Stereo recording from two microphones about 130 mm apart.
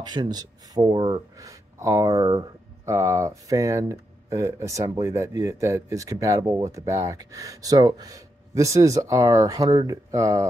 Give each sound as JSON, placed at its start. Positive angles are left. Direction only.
{"t": 0.0, "sound": "speech", "side_deg": -35}